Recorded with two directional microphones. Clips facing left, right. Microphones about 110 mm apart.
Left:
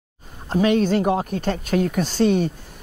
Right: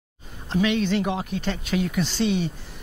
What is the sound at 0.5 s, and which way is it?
Speech, 45° left (ahead or behind).